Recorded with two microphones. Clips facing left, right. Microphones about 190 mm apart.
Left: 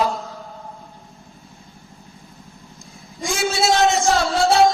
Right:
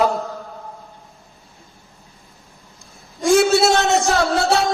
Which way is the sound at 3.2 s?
65° right (ahead or behind).